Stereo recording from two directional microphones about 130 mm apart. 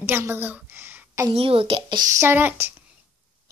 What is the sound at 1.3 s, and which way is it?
Speech, 45° right (ahead or behind).